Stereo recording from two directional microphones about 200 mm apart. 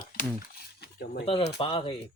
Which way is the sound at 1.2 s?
30° left (ahead or behind).